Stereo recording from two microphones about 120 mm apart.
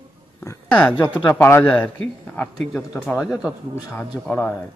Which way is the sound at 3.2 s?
5° right (ahead or behind).